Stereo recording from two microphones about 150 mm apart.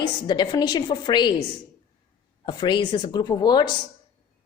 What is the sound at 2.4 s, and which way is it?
A woman's voice, 30° left (ahead or behind).